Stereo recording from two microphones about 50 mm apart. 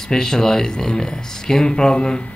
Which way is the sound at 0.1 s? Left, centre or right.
Centre.